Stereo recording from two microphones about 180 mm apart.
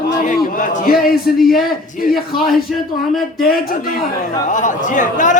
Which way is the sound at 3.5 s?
55° left (ahead or behind).